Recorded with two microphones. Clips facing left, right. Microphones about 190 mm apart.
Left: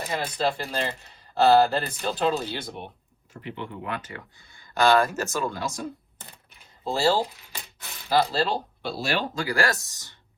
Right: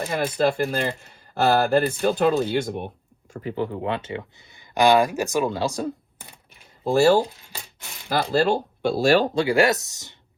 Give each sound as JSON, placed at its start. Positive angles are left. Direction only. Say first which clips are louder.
{"t": 0.1, "sound": "speech", "louder": "right 5 dB", "side_deg": -55}
{"t": 5.5, "sound": "speech", "louder": "right 7 dB", "side_deg": -30}
{"t": 6.8, "sound": "speech", "louder": "right 6 dB", "side_deg": -55}
{"t": 7.8, "sound": "a sound", "louder": "right 1 dB", "side_deg": -15}
{"t": 8.1, "sound": "speech", "louder": "right 3 dB", "side_deg": -50}
{"t": 9.3, "sound": "speech", "louder": "right 7 dB", "side_deg": -25}